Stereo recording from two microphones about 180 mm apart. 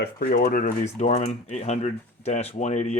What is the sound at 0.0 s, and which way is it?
Speech, 55° left (ahead or behind).